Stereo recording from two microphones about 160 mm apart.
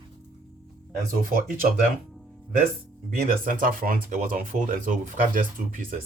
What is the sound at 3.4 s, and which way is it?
Speech, 60° right (ahead or behind).